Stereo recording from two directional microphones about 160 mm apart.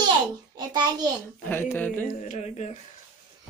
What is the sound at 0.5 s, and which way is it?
Speech, 25° right (ahead or behind).